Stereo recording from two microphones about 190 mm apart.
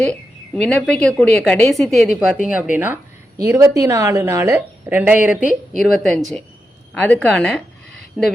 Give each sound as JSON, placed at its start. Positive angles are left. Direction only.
{"t": 0.0, "sound": "a woman's voice", "side_deg": 5}